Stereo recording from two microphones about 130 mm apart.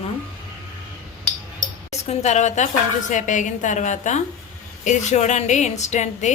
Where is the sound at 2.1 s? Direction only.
60° left (ahead or behind).